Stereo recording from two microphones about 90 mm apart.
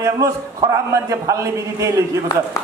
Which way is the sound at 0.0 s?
35° right (ahead or behind).